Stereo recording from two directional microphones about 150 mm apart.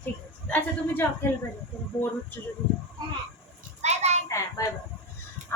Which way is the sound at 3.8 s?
45° right (ahead or behind).